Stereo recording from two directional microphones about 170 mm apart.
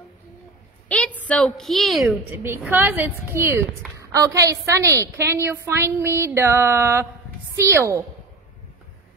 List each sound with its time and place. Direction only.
0.8 s a woman's voice: 5° left (ahead or behind)
2.3 s a woman's voice: 10° right (ahead or behind)